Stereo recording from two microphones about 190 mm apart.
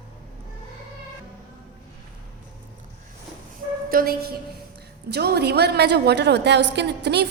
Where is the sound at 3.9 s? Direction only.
50° right (ahead or behind).